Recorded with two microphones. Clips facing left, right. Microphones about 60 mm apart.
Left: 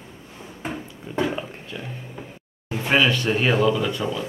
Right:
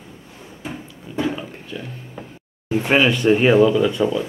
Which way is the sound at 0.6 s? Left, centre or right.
Left.